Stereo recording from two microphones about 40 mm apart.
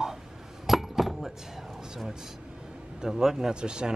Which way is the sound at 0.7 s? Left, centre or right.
Centre.